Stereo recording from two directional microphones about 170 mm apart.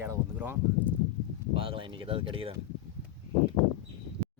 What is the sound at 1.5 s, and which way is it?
Speech, 30° right (ahead or behind).